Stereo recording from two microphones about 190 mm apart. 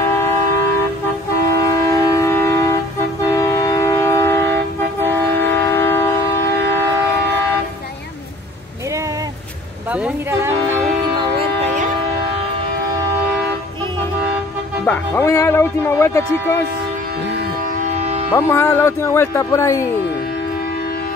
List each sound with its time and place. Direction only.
0.0 s vehicle: 15° left (ahead or behind)
1.5 s train: 20° left (ahead or behind)
3.3 s vehicle: 15° left (ahead or behind)
5.3 s train: 65° right (ahead or behind)
5.6 s train: 10° left (ahead or behind)
9.9 s a sound: 10° right (ahead or behind)
11.1 s music: 30° right (ahead or behind)
14.9 s music: 15° left (ahead or behind)
17.8 s music: 35° right (ahead or behind)
18.3 s speech: 10° left (ahead or behind)